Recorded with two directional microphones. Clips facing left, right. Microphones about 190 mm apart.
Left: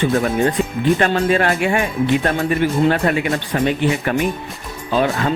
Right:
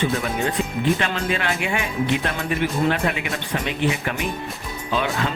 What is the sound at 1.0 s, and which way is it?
Speech, 45° left (ahead or behind).